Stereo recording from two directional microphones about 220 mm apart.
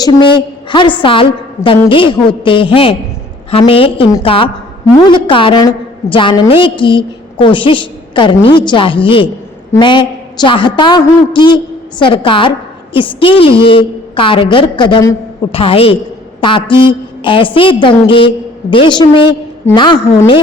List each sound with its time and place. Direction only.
0.7 s a woman's voice: 20° left (ahead or behind)